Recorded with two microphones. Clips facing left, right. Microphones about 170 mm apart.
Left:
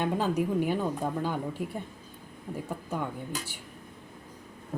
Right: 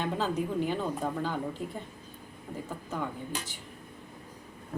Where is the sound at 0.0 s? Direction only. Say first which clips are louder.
Left 3 dB; 10° left (ahead or behind).